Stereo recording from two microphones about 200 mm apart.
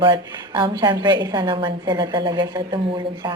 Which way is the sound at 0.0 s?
25° right (ahead or behind).